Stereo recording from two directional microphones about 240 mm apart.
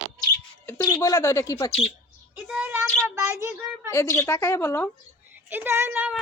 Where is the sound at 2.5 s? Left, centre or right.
Centre.